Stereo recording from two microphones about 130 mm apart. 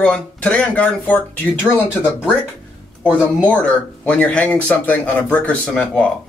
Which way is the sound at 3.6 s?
10° left (ahead or behind).